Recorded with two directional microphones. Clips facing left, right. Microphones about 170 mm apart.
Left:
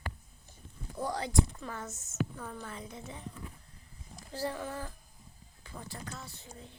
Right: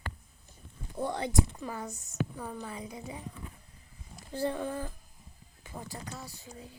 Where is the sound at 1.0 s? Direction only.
25° right (ahead or behind).